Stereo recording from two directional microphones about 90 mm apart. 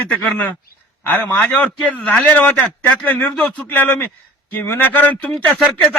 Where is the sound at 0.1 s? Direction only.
15° left (ahead or behind).